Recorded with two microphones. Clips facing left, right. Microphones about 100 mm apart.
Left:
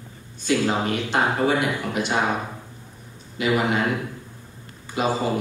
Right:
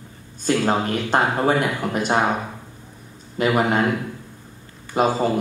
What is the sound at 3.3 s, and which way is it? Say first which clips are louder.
Speech: right 3 dB; 45° right (ahead or behind).